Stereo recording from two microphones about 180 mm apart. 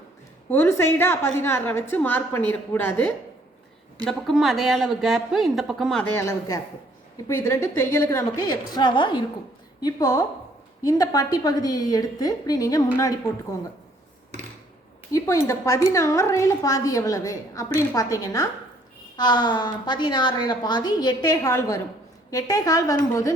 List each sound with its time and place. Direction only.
0.5 s a woman's voice: 15° left (ahead or behind)
4.0 s speech: centre (ahead or behind)
6.1 s a woman's voice: 20° left (ahead or behind)
15.1 s a woman's voice: 15° left (ahead or behind)